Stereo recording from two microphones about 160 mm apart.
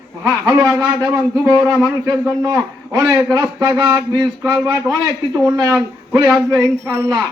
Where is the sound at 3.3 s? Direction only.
10° right (ahead or behind).